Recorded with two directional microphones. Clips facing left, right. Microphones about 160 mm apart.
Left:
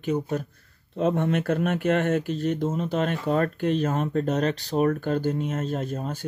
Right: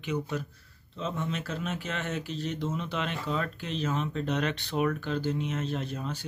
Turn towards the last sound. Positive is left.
turn(degrees=45)  # may be behind; listen again after turning